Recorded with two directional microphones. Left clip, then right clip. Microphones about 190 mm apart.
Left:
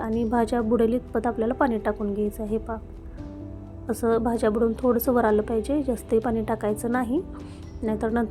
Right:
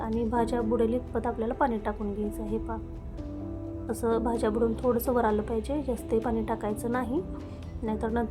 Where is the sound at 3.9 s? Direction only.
25° left (ahead or behind).